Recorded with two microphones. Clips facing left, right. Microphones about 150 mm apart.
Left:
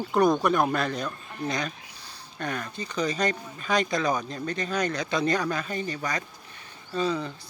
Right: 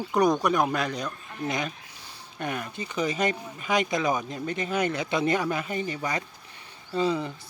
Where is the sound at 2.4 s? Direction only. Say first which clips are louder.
Even; 15° right (ahead or behind).